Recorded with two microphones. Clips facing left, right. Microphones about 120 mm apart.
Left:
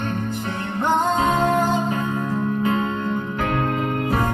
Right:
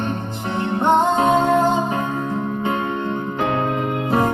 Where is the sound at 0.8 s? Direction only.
25° right (ahead or behind).